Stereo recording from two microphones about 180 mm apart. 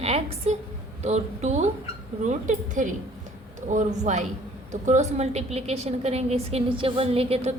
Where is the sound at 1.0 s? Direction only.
40° right (ahead or behind).